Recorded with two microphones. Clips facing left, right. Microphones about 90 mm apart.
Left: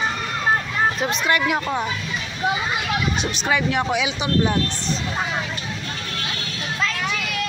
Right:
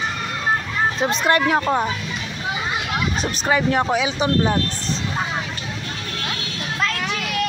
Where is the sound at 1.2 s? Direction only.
35° right (ahead or behind).